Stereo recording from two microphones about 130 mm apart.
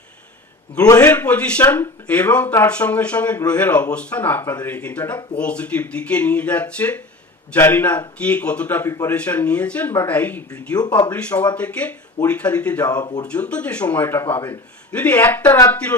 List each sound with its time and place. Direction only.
1.0 s speech: 10° left (ahead or behind)
8.9 s speech: 20° left (ahead or behind)
9.1 s speech: 10° left (ahead or behind)
10.8 s speech: 35° left (ahead or behind)
11.1 s speech: 10° left (ahead or behind)
12.9 s speech: 35° left (ahead or behind)
13.2 s speech: 10° left (ahead or behind)